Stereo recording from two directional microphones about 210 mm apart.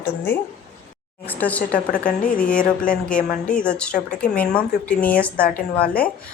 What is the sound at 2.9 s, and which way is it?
Speech, 40° left (ahead or behind).